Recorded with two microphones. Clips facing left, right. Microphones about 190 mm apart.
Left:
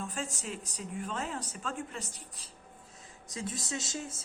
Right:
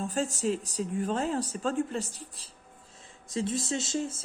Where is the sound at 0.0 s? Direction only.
35° right (ahead or behind).